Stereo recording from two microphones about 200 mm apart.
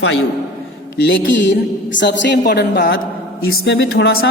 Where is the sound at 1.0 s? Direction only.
65° left (ahead or behind).